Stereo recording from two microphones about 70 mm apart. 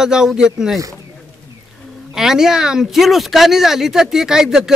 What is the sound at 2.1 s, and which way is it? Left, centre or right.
Speech, centre.